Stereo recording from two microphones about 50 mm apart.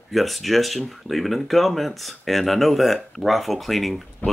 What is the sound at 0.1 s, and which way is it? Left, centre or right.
Speech, centre.